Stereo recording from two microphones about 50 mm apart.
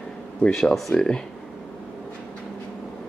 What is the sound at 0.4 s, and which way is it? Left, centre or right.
Speech, centre.